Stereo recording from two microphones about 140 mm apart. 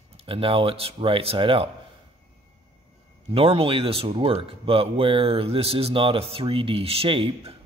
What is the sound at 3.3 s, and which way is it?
Speech, 40° right (ahead or behind).